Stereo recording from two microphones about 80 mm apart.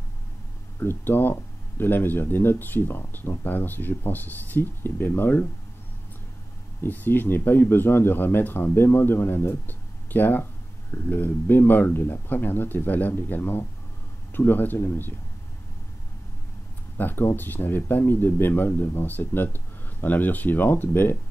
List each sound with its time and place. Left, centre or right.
0.7 s speech: left
6.8 s speech: left
16.9 s speech: left